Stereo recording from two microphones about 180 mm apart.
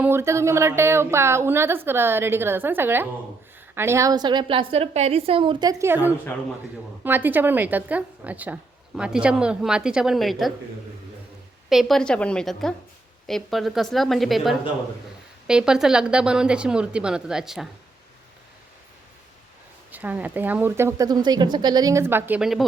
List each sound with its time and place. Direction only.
0.0 s a woman's voice: 15° right (ahead or behind)
11.7 s a woman's voice: centre (ahead or behind)
19.9 s a woman's voice: 10° right (ahead or behind)